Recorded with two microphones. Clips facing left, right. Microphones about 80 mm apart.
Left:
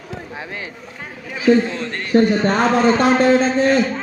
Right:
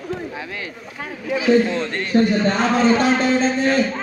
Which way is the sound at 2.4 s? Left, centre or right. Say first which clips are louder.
Left 2 dB; left.